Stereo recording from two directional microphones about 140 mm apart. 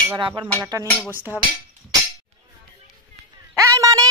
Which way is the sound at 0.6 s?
25° right (ahead or behind).